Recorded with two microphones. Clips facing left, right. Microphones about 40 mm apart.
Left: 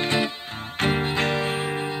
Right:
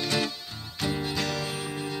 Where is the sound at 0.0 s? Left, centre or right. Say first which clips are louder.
Left 5 dB; left.